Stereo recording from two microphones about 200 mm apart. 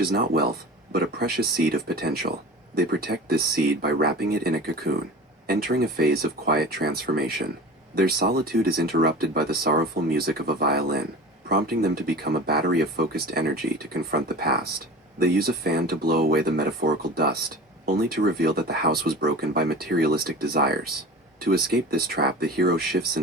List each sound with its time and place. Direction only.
0.0 s speech: 50° right (ahead or behind)